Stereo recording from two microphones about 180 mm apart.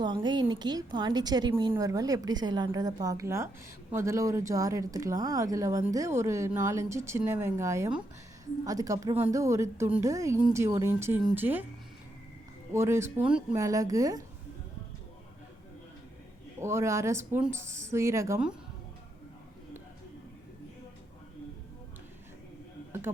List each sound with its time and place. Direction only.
0.0 s a woman's voice: 25° right (ahead or behind)
12.7 s speech: 15° right (ahead or behind)
13.6 s a woman's voice: 20° right (ahead or behind)
16.6 s speech: 15° right (ahead or behind)
22.9 s a sound: 15° right (ahead or behind)